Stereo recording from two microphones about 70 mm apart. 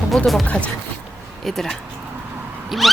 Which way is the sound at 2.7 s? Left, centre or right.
Centre.